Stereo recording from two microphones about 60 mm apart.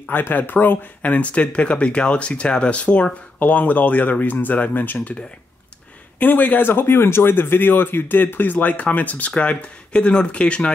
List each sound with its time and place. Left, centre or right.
0.1 s speech: left
6.1 s speech: left